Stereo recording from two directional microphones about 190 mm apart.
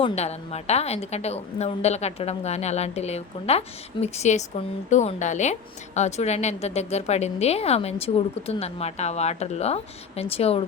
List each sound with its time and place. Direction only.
0.0 s a woman's voice: 35° left (ahead or behind)